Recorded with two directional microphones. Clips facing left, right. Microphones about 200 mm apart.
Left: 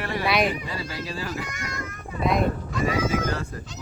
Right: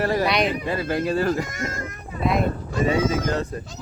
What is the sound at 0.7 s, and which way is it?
Speech, 55° right (ahead or behind).